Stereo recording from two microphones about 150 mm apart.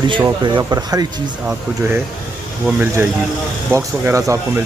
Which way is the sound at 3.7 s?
20° right (ahead or behind).